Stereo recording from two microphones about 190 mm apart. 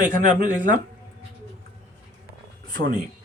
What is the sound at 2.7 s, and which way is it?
Speech, 50° right (ahead or behind).